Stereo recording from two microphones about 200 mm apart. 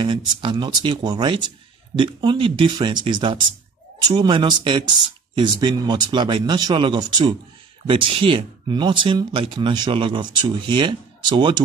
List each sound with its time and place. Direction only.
0.0 s speech: 25° right (ahead or behind)